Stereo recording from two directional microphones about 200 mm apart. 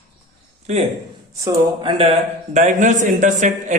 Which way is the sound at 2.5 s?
40° right (ahead or behind).